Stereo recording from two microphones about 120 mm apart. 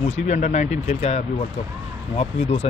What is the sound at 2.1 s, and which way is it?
Speech, 55° left (ahead or behind).